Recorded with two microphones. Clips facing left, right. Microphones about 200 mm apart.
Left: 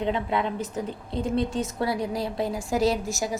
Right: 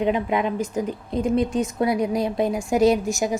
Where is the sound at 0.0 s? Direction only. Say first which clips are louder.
Right 4 dB; 15° right (ahead or behind).